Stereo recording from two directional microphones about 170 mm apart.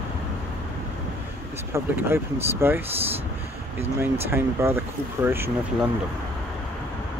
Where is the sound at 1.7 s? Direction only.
15° right (ahead or behind).